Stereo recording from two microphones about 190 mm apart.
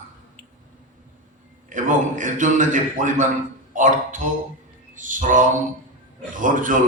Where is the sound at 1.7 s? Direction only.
40° right (ahead or behind).